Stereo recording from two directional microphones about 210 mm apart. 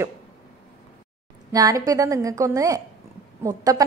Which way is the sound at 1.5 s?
15° right (ahead or behind).